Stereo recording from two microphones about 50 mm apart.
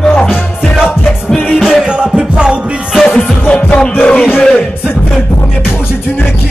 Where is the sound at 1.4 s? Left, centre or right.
Centre.